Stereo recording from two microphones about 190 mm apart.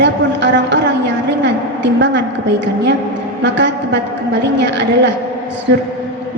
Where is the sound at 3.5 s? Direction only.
70° right (ahead or behind).